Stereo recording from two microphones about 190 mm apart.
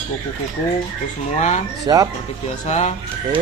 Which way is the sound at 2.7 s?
35° left (ahead or behind).